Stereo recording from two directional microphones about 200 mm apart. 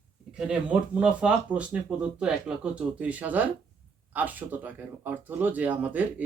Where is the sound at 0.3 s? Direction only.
5° right (ahead or behind).